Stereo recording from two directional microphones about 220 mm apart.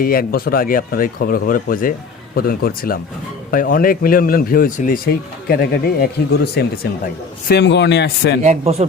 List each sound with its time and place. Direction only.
0.0 s a man's voice: 40° left (ahead or behind)
8.4 s speech: 30° right (ahead or behind)